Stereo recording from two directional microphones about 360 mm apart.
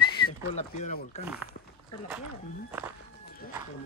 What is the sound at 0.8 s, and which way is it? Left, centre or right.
Speech, centre.